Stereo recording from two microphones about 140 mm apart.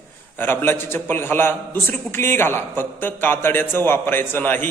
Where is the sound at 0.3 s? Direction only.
15° left (ahead or behind).